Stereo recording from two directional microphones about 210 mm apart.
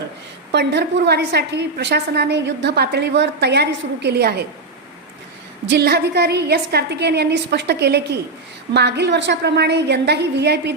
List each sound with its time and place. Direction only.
0.5 s a woman's voice: 55° right (ahead or behind)
5.6 s a woman's voice: 55° right (ahead or behind)